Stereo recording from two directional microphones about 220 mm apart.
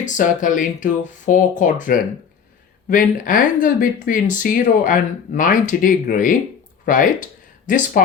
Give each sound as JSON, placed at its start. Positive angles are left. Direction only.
{"t": 0.0, "sound": "speech", "side_deg": 35}